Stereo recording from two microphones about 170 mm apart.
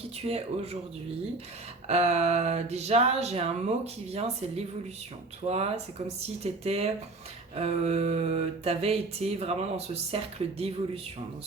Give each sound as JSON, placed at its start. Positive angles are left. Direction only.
{"t": 0.3, "sound": "mantra", "side_deg": -35}
{"t": 1.9, "sound": "mantra", "side_deg": -40}